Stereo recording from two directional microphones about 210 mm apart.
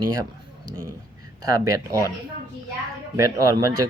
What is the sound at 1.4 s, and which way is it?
Speech, 15° right (ahead or behind).